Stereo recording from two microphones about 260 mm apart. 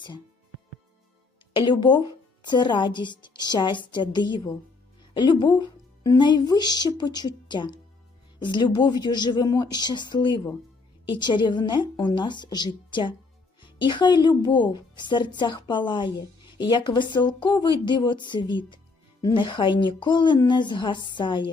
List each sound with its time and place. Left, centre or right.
1.5 s a woman's voice: centre